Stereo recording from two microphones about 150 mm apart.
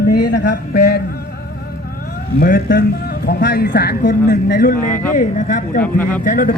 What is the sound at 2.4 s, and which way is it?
Speech, 70° left (ahead or behind).